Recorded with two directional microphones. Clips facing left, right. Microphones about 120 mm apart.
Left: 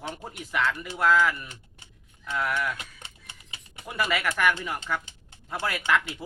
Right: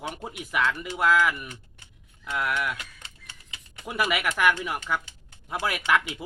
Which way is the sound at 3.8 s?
15° right (ahead or behind).